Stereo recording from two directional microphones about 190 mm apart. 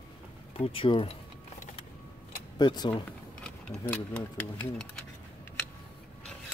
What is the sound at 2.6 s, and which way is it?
Speech, 20° left (ahead or behind).